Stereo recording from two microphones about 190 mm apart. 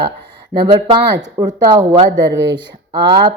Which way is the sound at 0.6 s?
25° right (ahead or behind).